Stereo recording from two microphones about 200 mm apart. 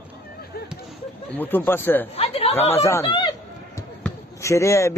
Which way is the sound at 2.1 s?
30° left (ahead or behind).